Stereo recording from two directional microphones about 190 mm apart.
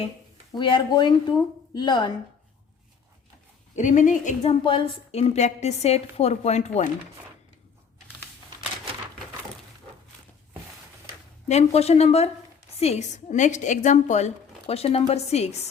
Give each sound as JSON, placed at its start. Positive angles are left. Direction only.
{"t": 0.5, "sound": "speech", "side_deg": 25}
{"t": 3.8, "sound": "a woman's voice", "side_deg": 40}
{"t": 11.4, "sound": "a woman's voice", "side_deg": 35}